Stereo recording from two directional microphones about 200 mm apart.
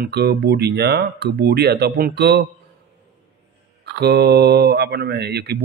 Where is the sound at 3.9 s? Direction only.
55° right (ahead or behind).